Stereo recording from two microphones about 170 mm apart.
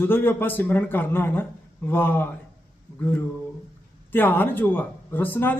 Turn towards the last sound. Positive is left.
turn(degrees=10)  # may be behind; listen again after turning